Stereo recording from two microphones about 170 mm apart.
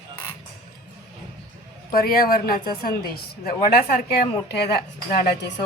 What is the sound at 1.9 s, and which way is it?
A woman's voice, 60° left (ahead or behind).